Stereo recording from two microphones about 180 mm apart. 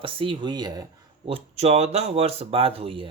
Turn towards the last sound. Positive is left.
turn(degrees=-30)  # may be behind; listen again after turning